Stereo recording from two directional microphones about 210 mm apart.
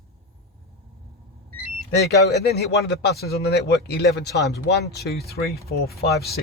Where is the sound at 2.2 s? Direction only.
50° left (ahead or behind).